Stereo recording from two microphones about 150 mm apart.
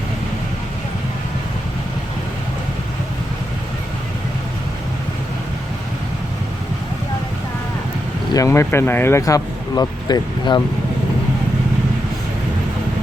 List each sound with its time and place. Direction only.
8.3 s speech: 20° left (ahead or behind)